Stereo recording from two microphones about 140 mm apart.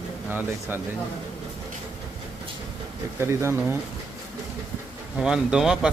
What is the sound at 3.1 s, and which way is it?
Speech, 20° right (ahead or behind).